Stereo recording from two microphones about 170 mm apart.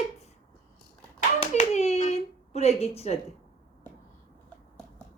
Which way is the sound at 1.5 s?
40° left (ahead or behind).